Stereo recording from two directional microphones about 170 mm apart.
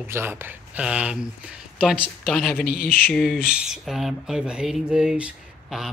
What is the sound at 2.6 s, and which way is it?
Speech, 60° left (ahead or behind).